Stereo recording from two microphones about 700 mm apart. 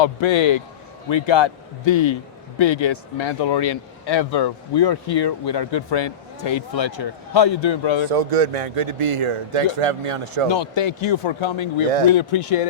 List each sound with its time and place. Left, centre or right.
0.0 s speech: left
8.1 s a man's voice: right
10.5 s speech: left